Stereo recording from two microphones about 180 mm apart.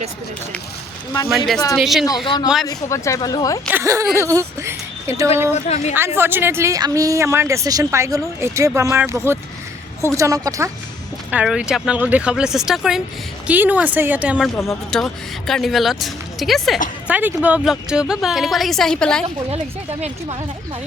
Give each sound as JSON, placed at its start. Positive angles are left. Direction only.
{"t": 1.3, "sound": "speech", "side_deg": 0}
{"t": 2.2, "sound": "speech", "side_deg": 25}
{"t": 3.7, "sound": "speech", "side_deg": -15}
{"t": 5.6, "sound": "a woman's voice", "side_deg": 40}
{"t": 6.1, "sound": "speech", "side_deg": -10}
{"t": 11.3, "sound": "speech", "side_deg": -5}
{"t": 14.5, "sound": "speech", "side_deg": 15}
{"t": 14.8, "sound": "speech", "side_deg": 5}